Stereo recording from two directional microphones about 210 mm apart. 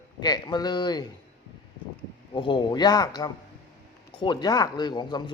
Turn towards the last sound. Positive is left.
turn(degrees=20)  # may be behind; listen again after turning